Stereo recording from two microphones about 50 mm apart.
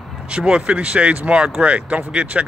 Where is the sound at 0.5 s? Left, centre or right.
Centre.